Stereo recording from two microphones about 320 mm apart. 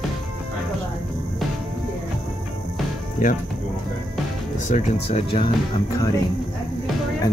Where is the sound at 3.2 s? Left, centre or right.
Left.